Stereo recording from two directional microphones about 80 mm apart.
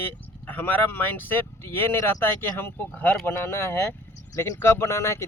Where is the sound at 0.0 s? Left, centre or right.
Left.